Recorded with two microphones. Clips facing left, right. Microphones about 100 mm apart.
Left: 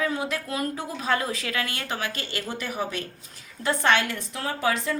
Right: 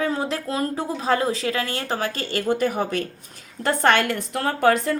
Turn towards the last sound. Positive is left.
turn(degrees=-50)  # may be behind; listen again after turning